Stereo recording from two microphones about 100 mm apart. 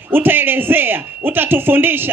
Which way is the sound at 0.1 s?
20° right (ahead or behind).